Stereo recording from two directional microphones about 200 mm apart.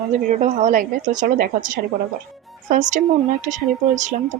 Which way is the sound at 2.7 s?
40° right (ahead or behind).